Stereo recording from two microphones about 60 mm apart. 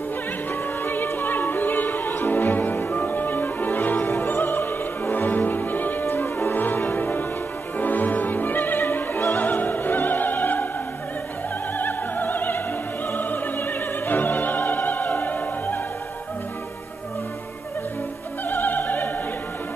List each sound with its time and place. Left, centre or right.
0.8 s music: left
11.8 s music: left
13.1 s opera: left
18.5 s opera: left